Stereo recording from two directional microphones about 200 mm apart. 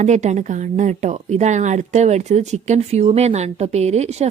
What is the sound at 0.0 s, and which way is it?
Speech, 35° right (ahead or behind).